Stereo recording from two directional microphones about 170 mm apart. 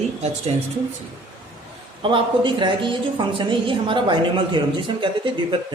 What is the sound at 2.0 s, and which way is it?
A woman's voice, 30° right (ahead or behind).